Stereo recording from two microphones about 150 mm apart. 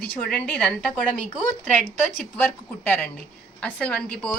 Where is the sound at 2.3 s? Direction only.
10° left (ahead or behind).